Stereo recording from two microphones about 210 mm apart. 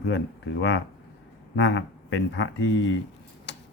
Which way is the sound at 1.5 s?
60° left (ahead or behind).